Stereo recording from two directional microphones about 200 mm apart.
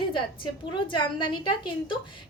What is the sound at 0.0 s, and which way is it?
A woman's voice, 25° left (ahead or behind).